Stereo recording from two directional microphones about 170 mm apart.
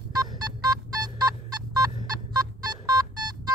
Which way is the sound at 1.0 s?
20° right (ahead or behind).